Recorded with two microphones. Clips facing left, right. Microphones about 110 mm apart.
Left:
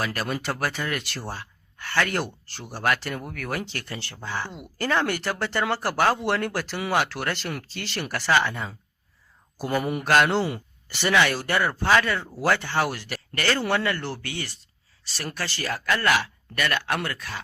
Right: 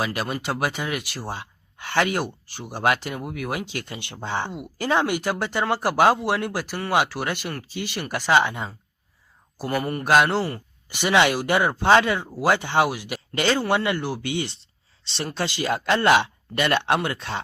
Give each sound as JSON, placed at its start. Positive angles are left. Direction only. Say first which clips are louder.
{"t": 0.0, "sound": "speech", "louder": "right 2 dB", "side_deg": -15}
{"t": 1.3, "sound": "a sound", "louder": "right 3 dB", "side_deg": -20}
{"t": 2.1, "sound": "speech", "louder": "right 1 dB", "side_deg": -10}
{"t": 9.6, "sound": "speech", "louder": "even", "side_deg": 0}
{"t": 10.8, "sound": "speech", "louder": "right 2 dB", "side_deg": -15}